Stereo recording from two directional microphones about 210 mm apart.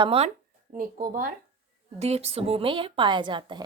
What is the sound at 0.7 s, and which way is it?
Speech, 40° right (ahead or behind).